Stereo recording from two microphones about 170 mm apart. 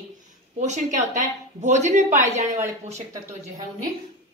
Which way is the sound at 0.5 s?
45° right (ahead or behind).